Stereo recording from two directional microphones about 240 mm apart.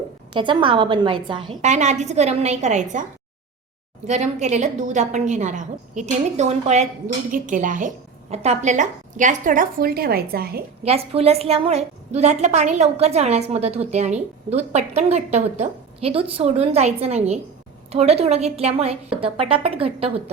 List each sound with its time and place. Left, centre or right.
0.3 s a woman's voice: right
10.8 s a woman's voice: right